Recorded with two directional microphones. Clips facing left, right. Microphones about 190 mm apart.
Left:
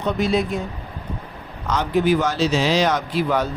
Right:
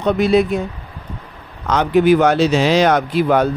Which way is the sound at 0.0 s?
65° right (ahead or behind).